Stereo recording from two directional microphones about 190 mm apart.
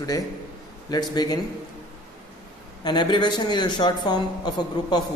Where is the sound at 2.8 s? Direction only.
25° left (ahead or behind).